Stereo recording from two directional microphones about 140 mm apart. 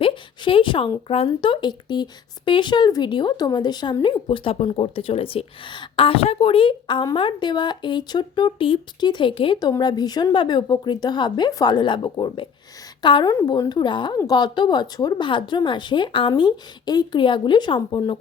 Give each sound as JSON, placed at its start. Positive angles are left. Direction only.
{"t": 0.0, "sound": "a woman's voice", "side_deg": 40}